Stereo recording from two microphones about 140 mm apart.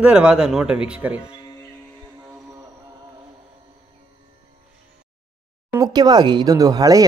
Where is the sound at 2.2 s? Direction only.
15° right (ahead or behind).